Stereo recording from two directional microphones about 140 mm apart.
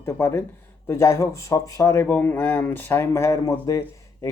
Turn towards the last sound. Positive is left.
turn(degrees=20)  # may be behind; listen again after turning